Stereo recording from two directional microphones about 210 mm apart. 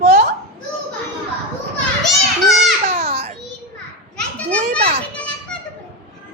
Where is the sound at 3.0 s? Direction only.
30° right (ahead or behind).